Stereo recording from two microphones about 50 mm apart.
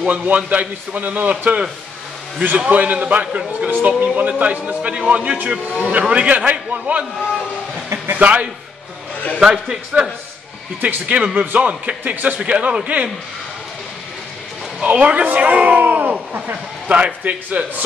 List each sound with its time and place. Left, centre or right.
0.0 s a man's voice: right
8.1 s a man's voice: right
9.4 s a man's voice: centre
10.8 s a man's voice: right
14.8 s a man's voice: right